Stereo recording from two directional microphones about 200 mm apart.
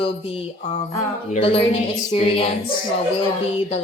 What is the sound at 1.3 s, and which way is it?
Speech, 30° left (ahead or behind).